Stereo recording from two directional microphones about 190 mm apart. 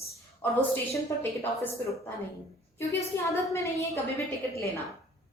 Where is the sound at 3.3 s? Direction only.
15° left (ahead or behind).